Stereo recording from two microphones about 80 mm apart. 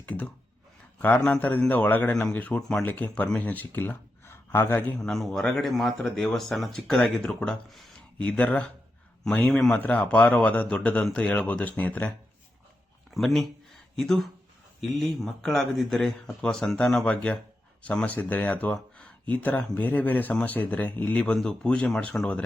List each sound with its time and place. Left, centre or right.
0.0 s a sound: centre
1.0 s speech: centre
2.6 s speech: centre
2.8 s speech: left
4.9 s speech: centre
8.2 s speech: centre
13.1 s speech: centre
21.3 s speech: centre